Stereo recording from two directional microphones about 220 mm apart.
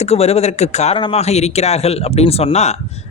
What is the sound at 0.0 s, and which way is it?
Speech, 30° left (ahead or behind).